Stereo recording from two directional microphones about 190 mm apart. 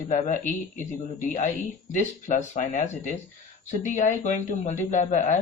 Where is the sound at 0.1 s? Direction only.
40° left (ahead or behind).